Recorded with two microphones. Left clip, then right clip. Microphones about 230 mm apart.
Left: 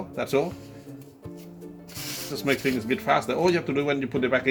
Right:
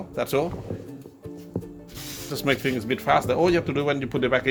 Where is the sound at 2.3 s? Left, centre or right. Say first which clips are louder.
Right 1 dB; right.